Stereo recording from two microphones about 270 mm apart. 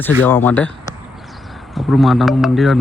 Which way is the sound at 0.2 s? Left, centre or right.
Centre.